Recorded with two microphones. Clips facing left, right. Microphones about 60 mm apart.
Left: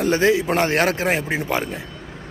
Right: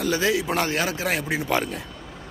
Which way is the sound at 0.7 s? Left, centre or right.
Left.